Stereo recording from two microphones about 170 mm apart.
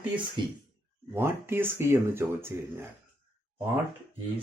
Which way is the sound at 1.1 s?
15° right (ahead or behind).